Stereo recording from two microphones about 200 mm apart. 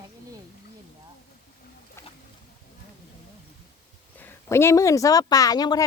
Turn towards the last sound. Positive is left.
turn(degrees=20)  # may be behind; listen again after turning